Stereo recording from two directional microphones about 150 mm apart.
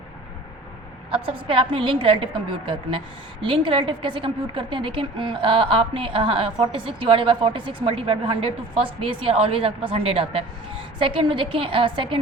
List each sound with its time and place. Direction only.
1.1 s a woman's voice: 35° right (ahead or behind)